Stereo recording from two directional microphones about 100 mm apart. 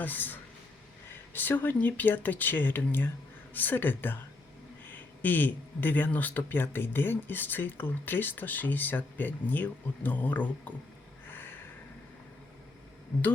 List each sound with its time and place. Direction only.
0.0 s speech: 20° left (ahead or behind)
11.3 s snort: 20° left (ahead or behind)